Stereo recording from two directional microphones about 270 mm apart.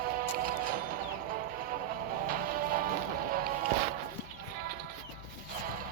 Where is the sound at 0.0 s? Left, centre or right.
Right.